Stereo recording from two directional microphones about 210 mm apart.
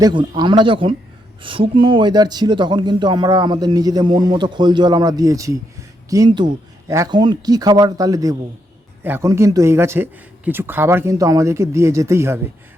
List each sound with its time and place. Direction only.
0.0 s speech: 20° right (ahead or behind)